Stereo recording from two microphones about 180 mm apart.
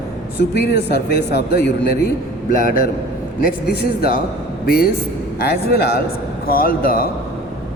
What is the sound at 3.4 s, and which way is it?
Speech, 55° left (ahead or behind).